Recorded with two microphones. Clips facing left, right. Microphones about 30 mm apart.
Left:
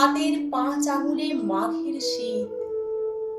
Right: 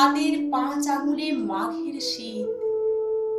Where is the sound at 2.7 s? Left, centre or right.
Centre.